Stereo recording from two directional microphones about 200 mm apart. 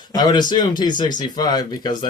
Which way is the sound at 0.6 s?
20° left (ahead or behind).